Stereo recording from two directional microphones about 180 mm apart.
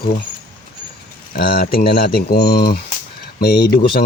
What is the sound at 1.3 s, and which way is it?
Speech, 55° left (ahead or behind).